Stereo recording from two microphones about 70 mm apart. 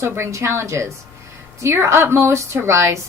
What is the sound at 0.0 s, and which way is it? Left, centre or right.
A woman's voice, right.